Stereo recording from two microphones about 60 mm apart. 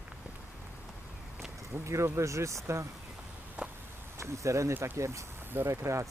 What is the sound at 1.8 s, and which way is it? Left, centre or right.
Speech, right.